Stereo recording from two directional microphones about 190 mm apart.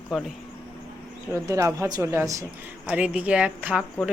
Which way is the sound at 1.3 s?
15° right (ahead or behind).